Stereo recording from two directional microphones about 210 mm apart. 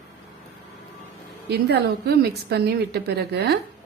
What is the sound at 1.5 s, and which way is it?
A woman's voice, 50° right (ahead or behind).